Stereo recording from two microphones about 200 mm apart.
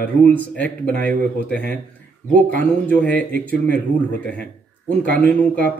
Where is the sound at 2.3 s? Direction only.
5° left (ahead or behind).